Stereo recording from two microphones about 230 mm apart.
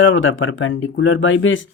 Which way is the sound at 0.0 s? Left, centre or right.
Left.